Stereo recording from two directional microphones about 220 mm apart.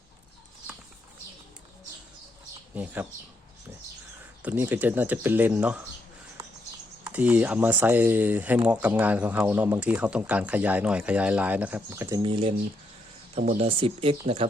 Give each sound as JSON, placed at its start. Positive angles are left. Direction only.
{"t": 2.7, "sound": "speech", "side_deg": -5}
{"t": 4.4, "sound": "speech", "side_deg": -10}
{"t": 7.0, "sound": "speech", "side_deg": -5}
{"t": 13.6, "sound": "speech", "side_deg": -25}